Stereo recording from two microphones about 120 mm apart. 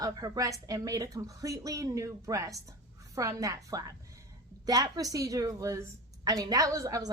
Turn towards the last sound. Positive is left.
turn(degrees=-30)  # may be behind; listen again after turning